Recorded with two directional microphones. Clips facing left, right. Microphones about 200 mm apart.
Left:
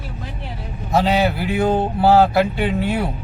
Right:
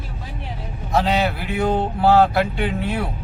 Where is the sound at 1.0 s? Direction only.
5° left (ahead or behind).